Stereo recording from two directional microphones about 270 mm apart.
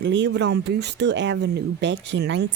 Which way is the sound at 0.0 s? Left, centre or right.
Right.